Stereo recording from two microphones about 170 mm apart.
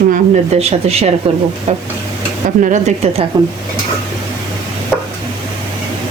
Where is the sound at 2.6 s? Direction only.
45° right (ahead or behind).